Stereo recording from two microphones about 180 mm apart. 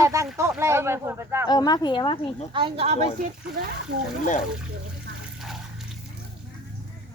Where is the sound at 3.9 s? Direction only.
70° right (ahead or behind).